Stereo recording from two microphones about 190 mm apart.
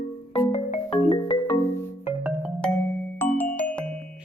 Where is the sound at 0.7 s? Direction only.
30° left (ahead or behind).